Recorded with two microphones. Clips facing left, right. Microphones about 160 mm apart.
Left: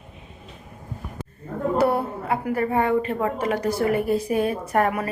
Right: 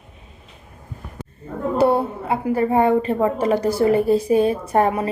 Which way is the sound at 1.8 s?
25° right (ahead or behind).